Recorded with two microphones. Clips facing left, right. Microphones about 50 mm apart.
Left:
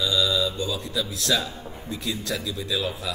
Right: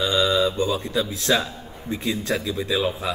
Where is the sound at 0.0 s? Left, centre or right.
Right.